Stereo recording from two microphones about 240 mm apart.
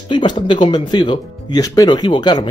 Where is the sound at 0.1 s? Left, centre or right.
Centre.